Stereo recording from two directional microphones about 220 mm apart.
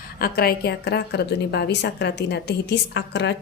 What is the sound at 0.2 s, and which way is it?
A woman's voice, 45° left (ahead or behind).